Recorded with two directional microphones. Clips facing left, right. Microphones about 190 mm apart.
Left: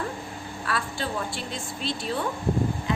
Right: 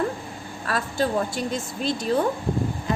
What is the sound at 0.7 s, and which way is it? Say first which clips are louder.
A woman's voice: right 6 dB; 40° right (ahead or behind).